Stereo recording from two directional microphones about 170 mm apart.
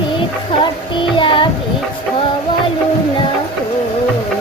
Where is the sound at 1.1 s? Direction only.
30° left (ahead or behind).